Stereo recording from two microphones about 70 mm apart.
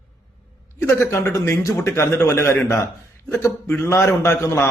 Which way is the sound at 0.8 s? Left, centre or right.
Left.